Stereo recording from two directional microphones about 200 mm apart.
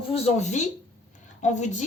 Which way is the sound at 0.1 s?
35° left (ahead or behind).